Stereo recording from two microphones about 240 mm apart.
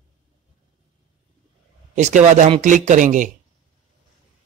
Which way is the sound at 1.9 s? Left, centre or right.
Right.